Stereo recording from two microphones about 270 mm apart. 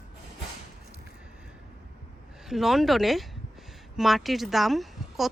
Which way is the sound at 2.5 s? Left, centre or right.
Centre.